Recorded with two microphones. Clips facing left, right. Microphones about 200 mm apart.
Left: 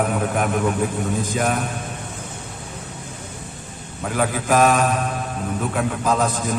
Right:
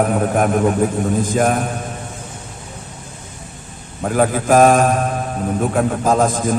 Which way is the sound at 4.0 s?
45° right (ahead or behind).